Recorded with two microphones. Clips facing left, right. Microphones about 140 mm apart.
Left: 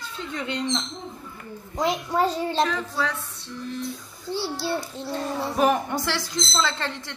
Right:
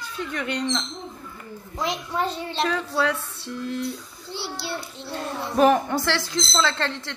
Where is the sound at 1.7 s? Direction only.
40° left (ahead or behind).